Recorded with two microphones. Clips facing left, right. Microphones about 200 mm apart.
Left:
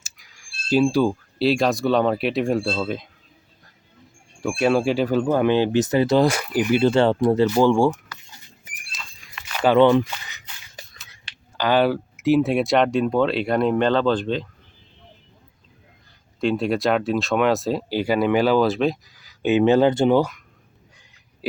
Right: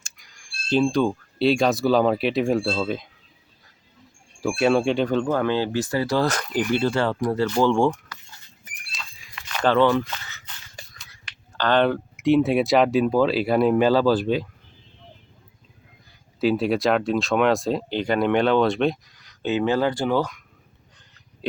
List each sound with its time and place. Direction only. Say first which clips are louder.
0.0 s speech: even; 5° left (ahead or behind)
4.4 s speech: even; centre (ahead or behind)
6.9 s speech: left 5 dB; 25° left (ahead or behind)
7.4 s a sound: left 1 dB; 10° left (ahead or behind)
9.6 s speech: left 4 dB; 20° left (ahead or behind)
11.5 s speech: left 1 dB; 10° left (ahead or behind); by 14.4 s 10° right (ahead or behind)
16.4 s speech: right 1 dB; centre (ahead or behind)
19.4 s speech: left 5 dB; 20° left (ahead or behind)